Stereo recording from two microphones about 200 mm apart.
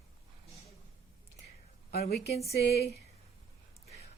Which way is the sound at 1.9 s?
50° left (ahead or behind).